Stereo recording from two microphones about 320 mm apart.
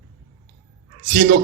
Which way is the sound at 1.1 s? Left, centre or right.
Right.